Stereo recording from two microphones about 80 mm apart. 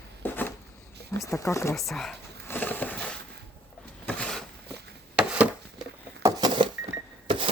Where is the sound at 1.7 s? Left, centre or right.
Centre.